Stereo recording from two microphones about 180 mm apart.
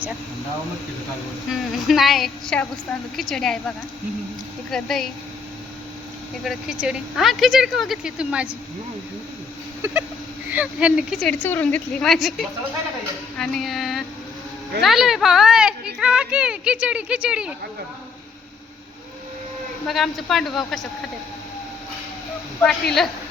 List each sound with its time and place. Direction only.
1.5 s speech: centre (ahead or behind)
6.4 s speech: 5° right (ahead or behind)
9.8 s a sound: 15° right (ahead or behind)
10.5 s speech: 5° right (ahead or behind)
13.3 s music: centre (ahead or behind)
14.8 s speech: centre (ahead or behind)
19.9 s speech: centre (ahead or behind)
22.6 s speech: 5° left (ahead or behind)